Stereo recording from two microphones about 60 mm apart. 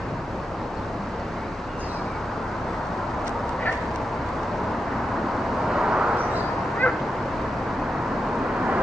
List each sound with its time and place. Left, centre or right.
5.7 s vehicle: centre
6.8 s vehicle: left